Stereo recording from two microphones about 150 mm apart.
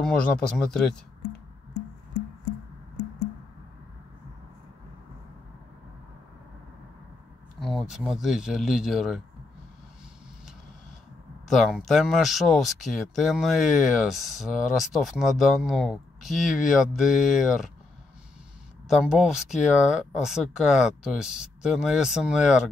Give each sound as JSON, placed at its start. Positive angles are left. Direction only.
{"t": 0.0, "sound": "speech", "side_deg": 5}
{"t": 7.6, "sound": "speech", "side_deg": 0}
{"t": 11.4, "sound": "speech", "side_deg": 0}
{"t": 18.9, "sound": "speech", "side_deg": -5}